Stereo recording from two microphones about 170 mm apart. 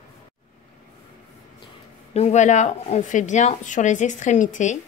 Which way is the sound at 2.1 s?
40° left (ahead or behind).